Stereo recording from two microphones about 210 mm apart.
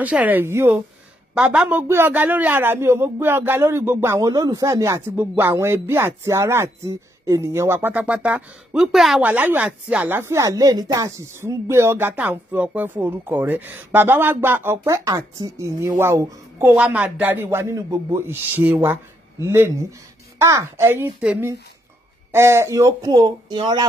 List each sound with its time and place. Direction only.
0.0 s a man's voice: 5° right (ahead or behind)